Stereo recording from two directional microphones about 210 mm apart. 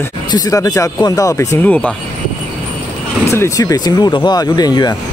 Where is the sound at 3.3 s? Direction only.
15° left (ahead or behind).